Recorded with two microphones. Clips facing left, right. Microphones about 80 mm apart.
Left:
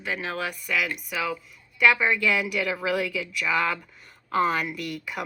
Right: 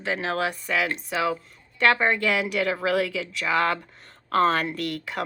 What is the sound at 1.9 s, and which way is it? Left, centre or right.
A woman's voice, right.